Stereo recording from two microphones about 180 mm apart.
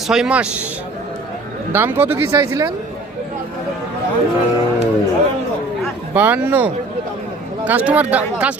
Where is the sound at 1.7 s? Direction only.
10° right (ahead or behind).